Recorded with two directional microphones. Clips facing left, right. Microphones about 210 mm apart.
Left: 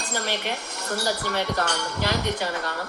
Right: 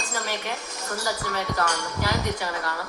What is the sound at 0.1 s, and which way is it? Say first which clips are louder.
Speech: left 3 dB; 70° left (ahead or behind).